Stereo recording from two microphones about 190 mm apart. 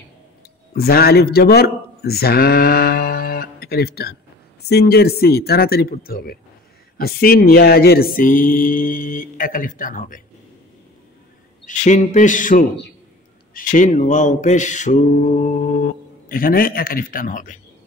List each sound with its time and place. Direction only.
0.7 s speech: 55° left (ahead or behind)
7.0 s mantra: 55° left (ahead or behind)
11.6 s speech: 40° left (ahead or behind)
13.5 s mantra: 45° left (ahead or behind)